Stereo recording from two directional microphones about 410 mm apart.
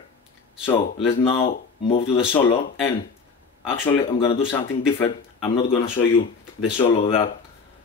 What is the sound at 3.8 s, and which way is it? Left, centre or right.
Speech, centre.